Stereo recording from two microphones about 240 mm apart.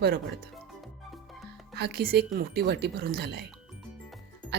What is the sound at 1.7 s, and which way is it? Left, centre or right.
Speech, right.